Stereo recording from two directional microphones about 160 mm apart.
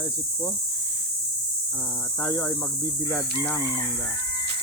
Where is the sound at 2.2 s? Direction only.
15° left (ahead or behind).